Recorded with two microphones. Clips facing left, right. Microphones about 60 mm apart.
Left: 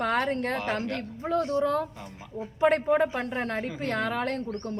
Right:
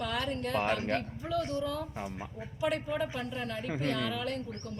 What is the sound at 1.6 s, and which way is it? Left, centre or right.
A woman's voice, left.